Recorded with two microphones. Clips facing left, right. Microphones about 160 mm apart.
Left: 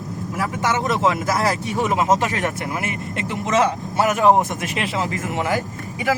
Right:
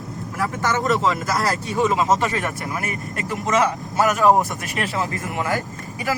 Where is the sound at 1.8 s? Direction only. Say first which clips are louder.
Even; 15° left (ahead or behind).